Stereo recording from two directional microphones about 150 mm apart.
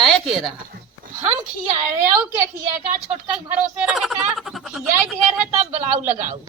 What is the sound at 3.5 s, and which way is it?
Speech, 10° right (ahead or behind).